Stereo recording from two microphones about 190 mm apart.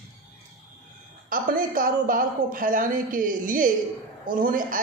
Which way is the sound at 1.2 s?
45° right (ahead or behind).